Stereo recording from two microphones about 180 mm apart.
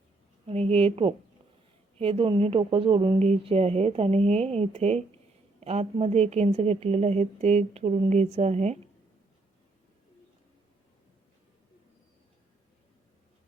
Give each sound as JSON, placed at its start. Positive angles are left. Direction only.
{"t": 0.4, "sound": "a woman's voice", "side_deg": -35}